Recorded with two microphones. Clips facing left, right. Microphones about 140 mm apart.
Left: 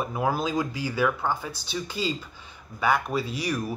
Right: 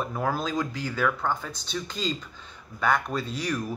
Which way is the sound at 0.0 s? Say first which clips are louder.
Left 2 dB; 10° left (ahead or behind).